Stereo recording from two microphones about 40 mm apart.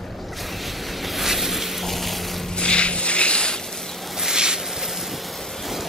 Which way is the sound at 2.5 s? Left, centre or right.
Left.